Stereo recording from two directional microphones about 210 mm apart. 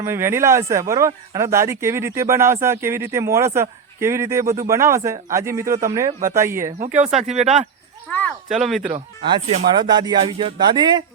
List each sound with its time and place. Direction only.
0.0 s speech: 10° right (ahead or behind)
6.7 s speech: 35° right (ahead or behind)
8.1 s speech: 5° left (ahead or behind)
8.9 s speech: 30° right (ahead or behind)